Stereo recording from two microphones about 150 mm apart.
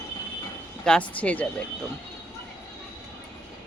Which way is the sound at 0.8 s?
5° left (ahead or behind).